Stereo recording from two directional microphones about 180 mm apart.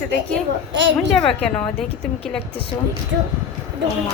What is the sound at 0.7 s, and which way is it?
Speech, 90° right.